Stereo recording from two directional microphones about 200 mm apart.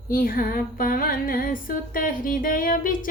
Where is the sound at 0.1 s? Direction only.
45° left (ahead or behind).